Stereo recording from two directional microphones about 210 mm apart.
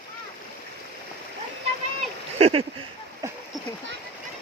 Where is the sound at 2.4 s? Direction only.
25° right (ahead or behind).